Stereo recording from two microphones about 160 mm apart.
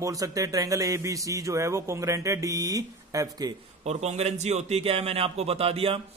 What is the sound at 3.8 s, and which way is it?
Speech, 45° right (ahead or behind).